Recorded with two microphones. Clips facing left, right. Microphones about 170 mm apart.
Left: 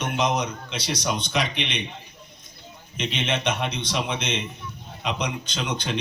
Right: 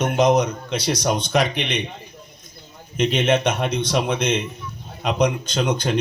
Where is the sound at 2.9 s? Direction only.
45° right (ahead or behind).